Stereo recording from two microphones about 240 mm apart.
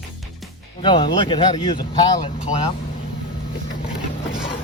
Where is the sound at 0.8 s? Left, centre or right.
Centre.